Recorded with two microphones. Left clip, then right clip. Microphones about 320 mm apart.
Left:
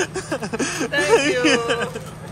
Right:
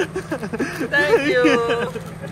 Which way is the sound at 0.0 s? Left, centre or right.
Centre.